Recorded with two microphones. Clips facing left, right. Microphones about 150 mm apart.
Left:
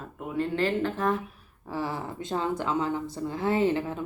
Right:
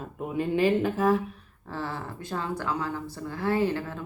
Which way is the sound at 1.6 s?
15° left (ahead or behind).